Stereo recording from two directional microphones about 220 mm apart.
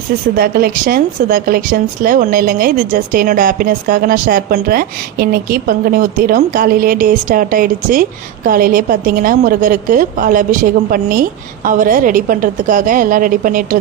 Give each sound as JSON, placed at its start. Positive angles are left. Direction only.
{"t": 0.3, "sound": "speech", "side_deg": -45}